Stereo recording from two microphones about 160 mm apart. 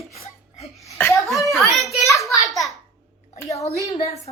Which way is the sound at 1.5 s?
Centre (ahead or behind).